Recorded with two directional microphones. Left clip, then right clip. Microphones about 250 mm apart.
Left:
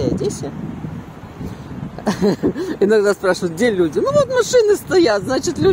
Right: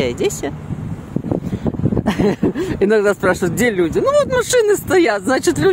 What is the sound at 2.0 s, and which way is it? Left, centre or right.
Speech, right.